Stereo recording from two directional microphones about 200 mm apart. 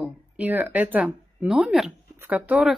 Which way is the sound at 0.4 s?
10° right (ahead or behind).